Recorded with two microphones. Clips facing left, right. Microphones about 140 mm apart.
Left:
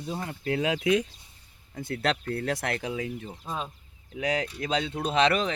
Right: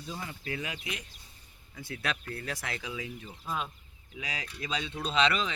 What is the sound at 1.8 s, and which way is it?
Speech, 60° left (ahead or behind).